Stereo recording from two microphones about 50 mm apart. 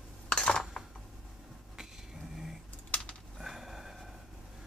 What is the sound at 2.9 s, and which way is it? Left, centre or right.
Computer keyboard, left.